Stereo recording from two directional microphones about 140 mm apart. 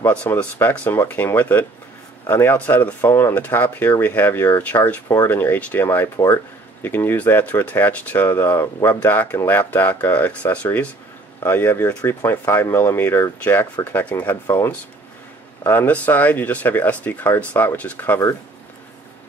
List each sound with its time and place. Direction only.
0.0 s speech: 10° left (ahead or behind)
6.1 s speech: 25° left (ahead or behind)
6.8 s speech: 15° left (ahead or behind)